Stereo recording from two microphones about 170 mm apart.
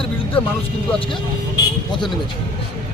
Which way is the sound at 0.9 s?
30° left (ahead or behind).